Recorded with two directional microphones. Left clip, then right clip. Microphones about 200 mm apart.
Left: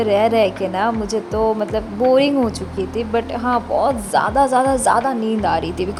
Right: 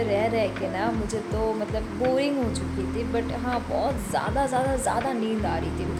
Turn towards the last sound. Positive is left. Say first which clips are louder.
# left 10 dB
turn(degrees=35)  # may be behind; listen again after turning